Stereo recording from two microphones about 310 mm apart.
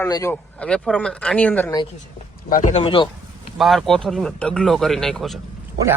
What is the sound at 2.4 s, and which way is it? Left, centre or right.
Speech, left.